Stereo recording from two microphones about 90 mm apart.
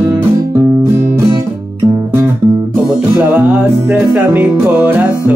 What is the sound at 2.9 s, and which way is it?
Music, 10° right (ahead or behind).